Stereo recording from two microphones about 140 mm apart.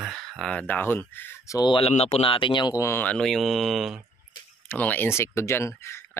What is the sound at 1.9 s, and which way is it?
Speech, 45° left (ahead or behind).